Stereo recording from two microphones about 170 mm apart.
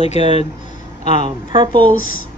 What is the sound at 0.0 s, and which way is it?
Speech, 40° left (ahead or behind).